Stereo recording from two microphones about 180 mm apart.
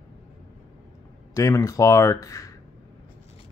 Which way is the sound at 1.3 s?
20° left (ahead or behind).